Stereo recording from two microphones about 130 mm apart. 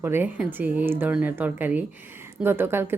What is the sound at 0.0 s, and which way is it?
A woman's voice, 15° right (ahead or behind).